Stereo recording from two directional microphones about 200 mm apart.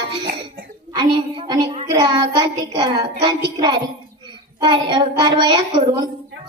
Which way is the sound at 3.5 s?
20° right (ahead or behind).